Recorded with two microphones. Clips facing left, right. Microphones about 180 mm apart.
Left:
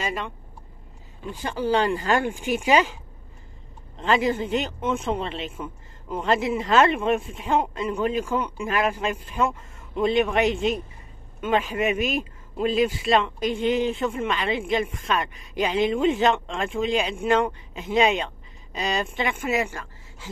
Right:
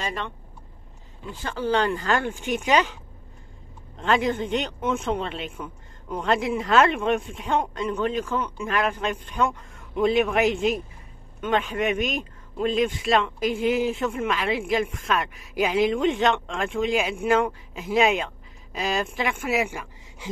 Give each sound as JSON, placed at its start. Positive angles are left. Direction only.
{"t": 0.0, "sound": "speech", "side_deg": 10}
{"t": 1.3, "sound": "speech", "side_deg": 15}
{"t": 4.0, "sound": "speech", "side_deg": 0}
{"t": 19.7, "sound": "speech", "side_deg": -15}